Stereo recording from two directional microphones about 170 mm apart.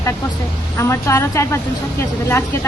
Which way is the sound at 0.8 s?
15° left (ahead or behind).